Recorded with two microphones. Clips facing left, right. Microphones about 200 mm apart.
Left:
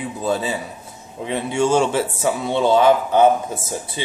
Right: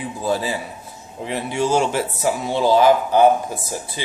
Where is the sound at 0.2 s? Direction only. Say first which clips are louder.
Even; 25° left (ahead or behind).